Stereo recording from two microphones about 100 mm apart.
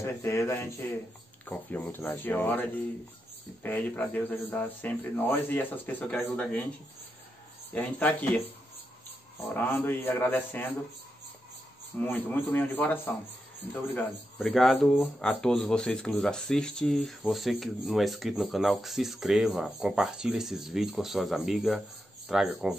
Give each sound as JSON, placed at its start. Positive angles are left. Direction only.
{"t": 0.0, "sound": "speech", "side_deg": 30}
{"t": 1.4, "sound": "speech", "side_deg": 15}
{"t": 7.7, "sound": "speech", "side_deg": 15}
{"t": 9.4, "sound": "speech", "side_deg": 20}
{"t": 12.0, "sound": "speech", "side_deg": 20}
{"t": 14.4, "sound": "speech", "side_deg": 0}